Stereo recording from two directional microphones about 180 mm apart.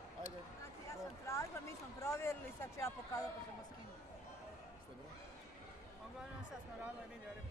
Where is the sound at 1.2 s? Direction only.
15° left (ahead or behind).